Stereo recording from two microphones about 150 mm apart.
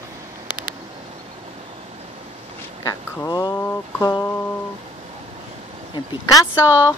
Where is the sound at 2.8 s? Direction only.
25° left (ahead or behind).